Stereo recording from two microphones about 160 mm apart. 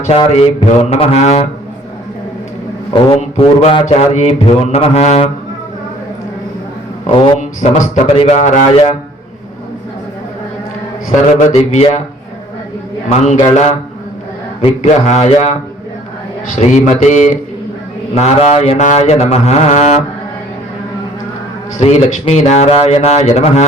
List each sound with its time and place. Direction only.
0.3 s mantra: 40° left (ahead or behind)
3.2 s mantra: 35° left (ahead or behind)
3.8 s a man's voice: 45° left (ahead or behind)
7.1 s mantra: 30° left (ahead or behind)
7.3 s a man's voice: 50° left (ahead or behind)
11.1 s a man's voice: 50° left (ahead or behind)
13.1 s a man's voice: 45° left (ahead or behind)
16.6 s a man's voice: 50° left (ahead or behind)
21.8 s a man's voice: 45° left (ahead or behind)